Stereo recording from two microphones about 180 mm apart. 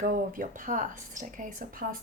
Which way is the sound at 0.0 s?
50° right (ahead or behind).